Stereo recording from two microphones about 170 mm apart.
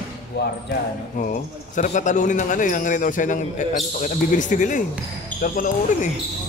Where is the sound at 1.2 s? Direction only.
50° left (ahead or behind).